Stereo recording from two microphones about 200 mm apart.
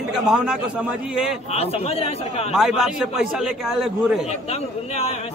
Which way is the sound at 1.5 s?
30° left (ahead or behind).